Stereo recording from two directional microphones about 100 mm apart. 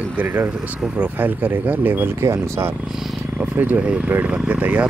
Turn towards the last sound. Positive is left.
turn(degrees=-15)  # may be behind; listen again after turning